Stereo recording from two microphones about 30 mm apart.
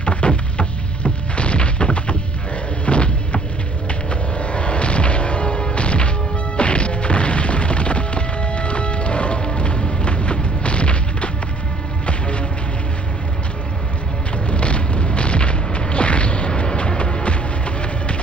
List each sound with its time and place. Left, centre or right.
0.0 s music: left
14.4 s boom: left